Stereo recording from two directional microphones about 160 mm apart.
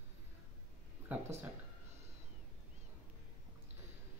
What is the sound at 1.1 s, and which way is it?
Speech, 10° right (ahead or behind).